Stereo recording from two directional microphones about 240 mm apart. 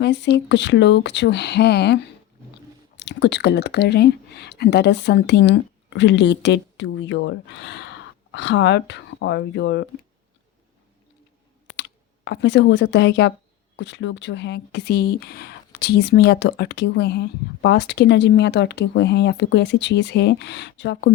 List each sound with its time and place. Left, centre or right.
0.0 s speech: left
11.8 s speech: left